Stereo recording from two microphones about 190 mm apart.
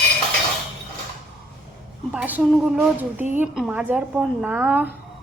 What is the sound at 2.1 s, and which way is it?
A woman's voice, 5° right (ahead or behind).